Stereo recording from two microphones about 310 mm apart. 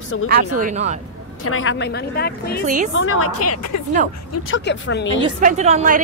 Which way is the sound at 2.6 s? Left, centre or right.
Right.